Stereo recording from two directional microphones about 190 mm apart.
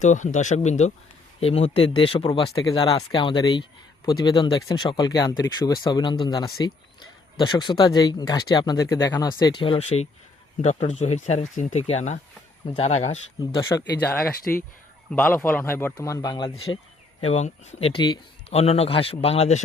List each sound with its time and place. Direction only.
0.0 s speech: 40° left (ahead or behind)
13.6 s a man's voice: 15° left (ahead or behind)
14.5 s a man's voice: 5° left (ahead or behind); by 16.8 s 25° left (ahead or behind)
17.2 s speech: 35° left (ahead or behind)